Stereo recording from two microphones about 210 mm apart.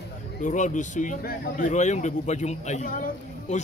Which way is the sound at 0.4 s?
35° left (ahead or behind).